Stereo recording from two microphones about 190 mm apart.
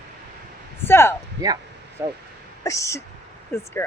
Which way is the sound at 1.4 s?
20° right (ahead or behind).